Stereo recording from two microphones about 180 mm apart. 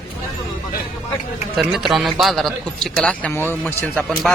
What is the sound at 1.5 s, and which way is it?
A man's voice, centre (ahead or behind).